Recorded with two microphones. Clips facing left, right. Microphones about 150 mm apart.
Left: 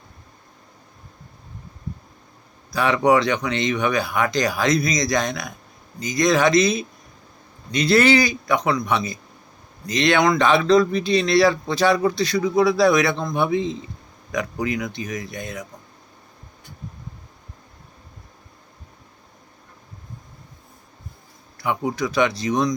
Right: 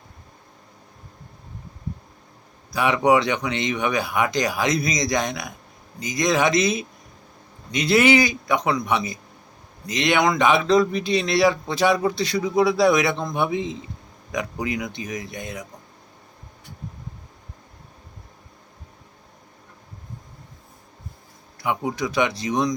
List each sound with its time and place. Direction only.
2.7 s speech: 15° right (ahead or behind)
21.6 s speech: 15° right (ahead or behind)